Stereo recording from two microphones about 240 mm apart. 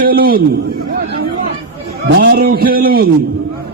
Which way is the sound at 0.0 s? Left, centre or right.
Right.